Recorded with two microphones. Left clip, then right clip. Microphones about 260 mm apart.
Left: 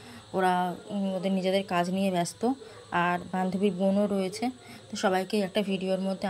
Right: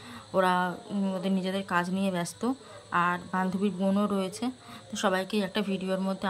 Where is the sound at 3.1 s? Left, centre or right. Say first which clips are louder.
Even; right.